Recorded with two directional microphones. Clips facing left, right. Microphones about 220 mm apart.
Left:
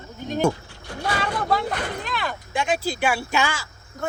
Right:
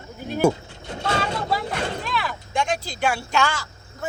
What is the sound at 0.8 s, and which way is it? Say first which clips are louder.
Speech: right 1 dB; 25° right (ahead or behind).